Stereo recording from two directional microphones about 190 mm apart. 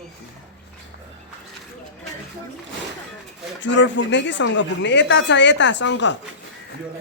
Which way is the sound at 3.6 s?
70° left (ahead or behind).